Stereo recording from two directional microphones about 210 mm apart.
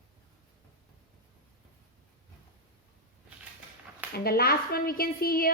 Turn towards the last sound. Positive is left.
turn(degrees=45)  # may be behind; listen again after turning